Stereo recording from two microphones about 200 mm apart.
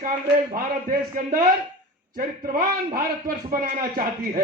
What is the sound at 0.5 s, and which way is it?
A man's voice, 45° right (ahead or behind).